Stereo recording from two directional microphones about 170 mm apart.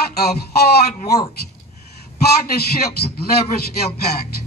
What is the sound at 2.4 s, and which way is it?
Speech, 65° left (ahead or behind).